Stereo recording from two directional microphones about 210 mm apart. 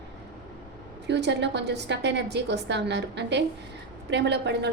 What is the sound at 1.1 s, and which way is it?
A woman's voice, 55° right (ahead or behind).